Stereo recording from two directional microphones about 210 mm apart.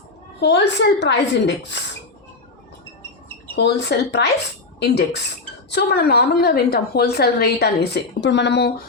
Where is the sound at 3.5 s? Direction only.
55° left (ahead or behind).